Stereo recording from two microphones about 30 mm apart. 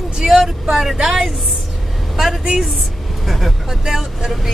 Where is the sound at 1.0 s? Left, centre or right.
Centre.